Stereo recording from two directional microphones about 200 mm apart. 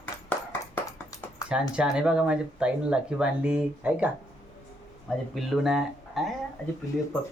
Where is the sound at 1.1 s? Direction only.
15° left (ahead or behind).